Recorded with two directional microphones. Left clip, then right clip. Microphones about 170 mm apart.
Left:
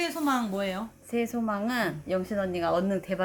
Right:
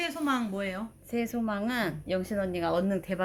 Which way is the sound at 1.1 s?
Centre (ahead or behind).